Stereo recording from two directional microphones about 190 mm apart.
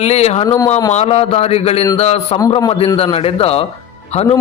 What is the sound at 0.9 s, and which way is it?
Speech, 30° left (ahead or behind).